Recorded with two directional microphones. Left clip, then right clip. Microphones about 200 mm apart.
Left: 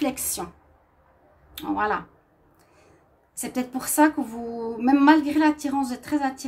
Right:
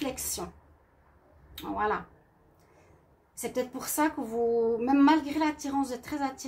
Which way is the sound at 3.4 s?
45° left (ahead or behind).